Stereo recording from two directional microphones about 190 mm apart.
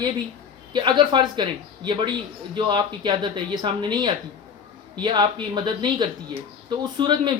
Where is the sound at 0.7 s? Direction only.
25° right (ahead or behind).